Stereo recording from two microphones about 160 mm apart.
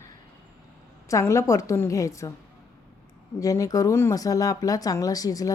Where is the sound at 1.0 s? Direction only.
20° left (ahead or behind).